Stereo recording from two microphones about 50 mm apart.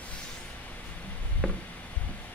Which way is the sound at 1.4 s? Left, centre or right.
Centre.